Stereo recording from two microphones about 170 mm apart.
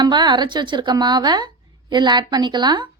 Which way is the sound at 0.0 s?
25° right (ahead or behind).